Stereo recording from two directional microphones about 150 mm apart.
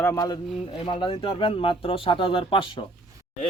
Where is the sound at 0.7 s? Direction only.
35° left (ahead or behind).